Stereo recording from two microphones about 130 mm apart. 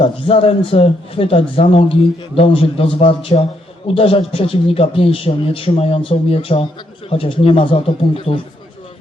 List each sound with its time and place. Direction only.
0.0 s a man's voice: 45° left (ahead or behind)